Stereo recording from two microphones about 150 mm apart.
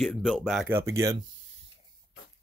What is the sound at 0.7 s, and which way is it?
Speech, 15° right (ahead or behind).